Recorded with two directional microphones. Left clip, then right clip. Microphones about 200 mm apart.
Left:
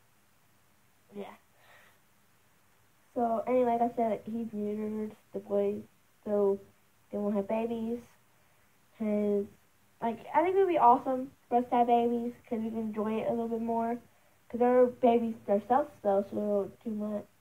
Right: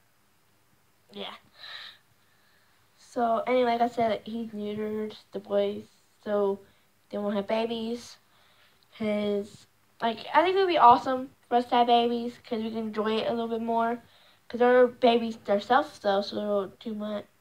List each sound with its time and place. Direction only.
1.1 s a sound: 20° right (ahead or behind)
3.2 s a woman's voice: 20° right (ahead or behind)
8.9 s a woman's voice: 20° right (ahead or behind)